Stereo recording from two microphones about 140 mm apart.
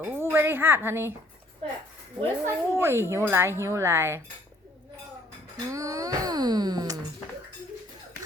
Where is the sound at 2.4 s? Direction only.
20° right (ahead or behind).